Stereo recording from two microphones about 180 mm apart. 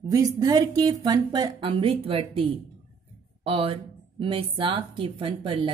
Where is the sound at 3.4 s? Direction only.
30° right (ahead or behind).